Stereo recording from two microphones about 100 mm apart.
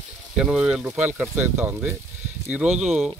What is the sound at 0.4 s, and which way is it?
Speech, 10° right (ahead or behind).